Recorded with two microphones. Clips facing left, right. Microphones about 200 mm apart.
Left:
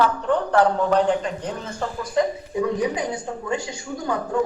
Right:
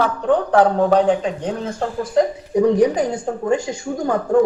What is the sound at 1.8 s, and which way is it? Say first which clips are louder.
A woman's voice: right 4 dB; 45° right (ahead or behind).